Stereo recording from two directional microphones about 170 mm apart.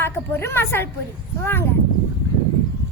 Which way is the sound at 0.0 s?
15° left (ahead or behind).